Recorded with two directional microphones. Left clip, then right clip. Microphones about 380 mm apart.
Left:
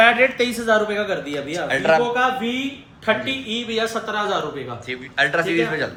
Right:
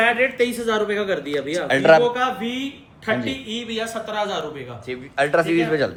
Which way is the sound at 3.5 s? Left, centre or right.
Centre.